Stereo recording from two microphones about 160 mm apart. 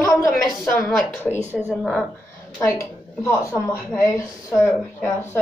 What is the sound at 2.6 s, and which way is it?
A woman's voice, 20° left (ahead or behind).